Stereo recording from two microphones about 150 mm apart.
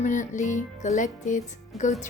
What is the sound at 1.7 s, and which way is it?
Speech, centre (ahead or behind).